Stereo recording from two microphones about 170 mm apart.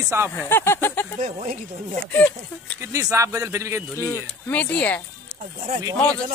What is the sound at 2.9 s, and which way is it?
Speech, 20° right (ahead or behind).